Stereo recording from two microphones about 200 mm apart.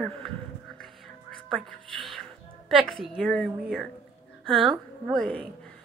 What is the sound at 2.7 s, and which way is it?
A woman's voice, centre (ahead or behind).